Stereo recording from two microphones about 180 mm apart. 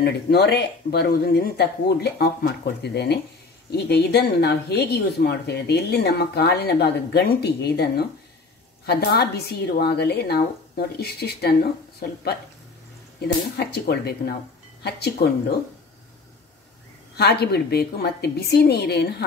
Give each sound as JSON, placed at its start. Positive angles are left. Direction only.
{"t": 0.0, "sound": "speech", "side_deg": 65}
{"t": 13.6, "sound": "speech", "side_deg": 65}
{"t": 17.2, "sound": "speech", "side_deg": 65}